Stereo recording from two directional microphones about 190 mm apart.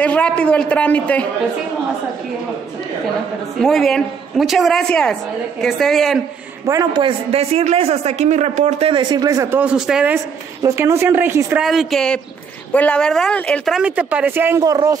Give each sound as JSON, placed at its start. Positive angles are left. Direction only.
{"t": 0.0, "sound": "a man's voice", "side_deg": 5}
{"t": 3.6, "sound": "a woman's voice", "side_deg": 0}
{"t": 6.6, "sound": "a man's voice", "side_deg": -20}
{"t": 11.6, "sound": "a woman's voice", "side_deg": 0}